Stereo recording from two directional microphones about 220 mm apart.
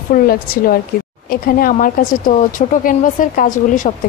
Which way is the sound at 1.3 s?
40° left (ahead or behind).